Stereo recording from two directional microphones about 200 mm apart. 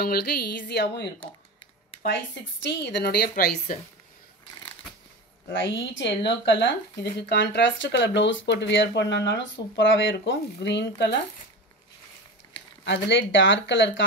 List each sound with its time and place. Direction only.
0.0 s speech: 50° left (ahead or behind)
2.6 s speech: 60° left (ahead or behind)
5.5 s speech: 65° left (ahead or behind)
12.8 s speech: 65° left (ahead or behind)